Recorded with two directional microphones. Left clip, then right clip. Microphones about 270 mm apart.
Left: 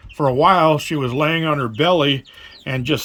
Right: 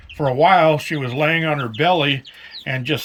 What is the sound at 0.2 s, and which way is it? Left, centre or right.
Speech, centre.